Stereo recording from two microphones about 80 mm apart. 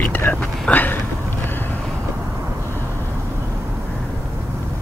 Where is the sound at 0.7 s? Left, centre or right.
Left.